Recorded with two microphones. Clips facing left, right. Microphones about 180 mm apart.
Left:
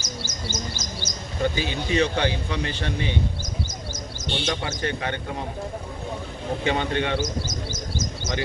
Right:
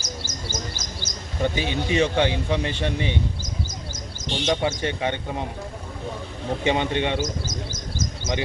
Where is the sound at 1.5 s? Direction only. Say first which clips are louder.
Right 2 dB; 20° right (ahead or behind).